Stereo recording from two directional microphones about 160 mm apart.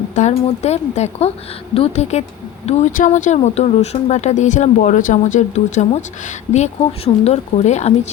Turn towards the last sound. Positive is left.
turn(degrees=45)  # may be behind; listen again after turning